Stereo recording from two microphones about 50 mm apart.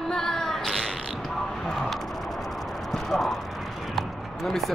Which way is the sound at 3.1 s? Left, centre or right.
Centre.